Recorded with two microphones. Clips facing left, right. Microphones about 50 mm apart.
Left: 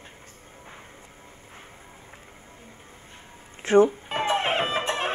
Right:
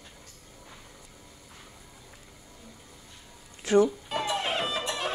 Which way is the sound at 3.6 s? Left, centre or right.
Left.